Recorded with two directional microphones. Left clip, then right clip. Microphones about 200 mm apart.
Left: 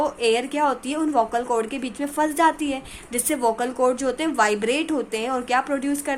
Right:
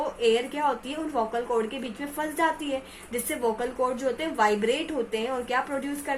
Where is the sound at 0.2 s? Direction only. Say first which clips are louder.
Even; 50° left (ahead or behind).